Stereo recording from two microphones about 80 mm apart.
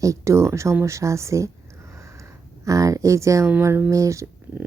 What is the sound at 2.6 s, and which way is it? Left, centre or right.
Speech, right.